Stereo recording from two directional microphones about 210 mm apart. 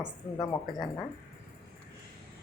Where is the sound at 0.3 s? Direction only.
15° left (ahead or behind).